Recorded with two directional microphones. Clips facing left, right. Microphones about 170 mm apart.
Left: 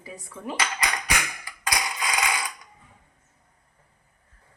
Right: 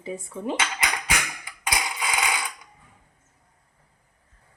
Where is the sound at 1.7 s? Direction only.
25° right (ahead or behind).